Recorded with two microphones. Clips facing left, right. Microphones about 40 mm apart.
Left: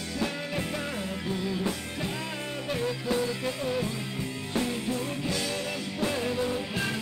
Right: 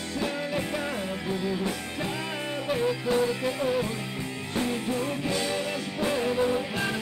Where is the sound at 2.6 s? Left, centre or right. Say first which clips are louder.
Right 3 dB; centre.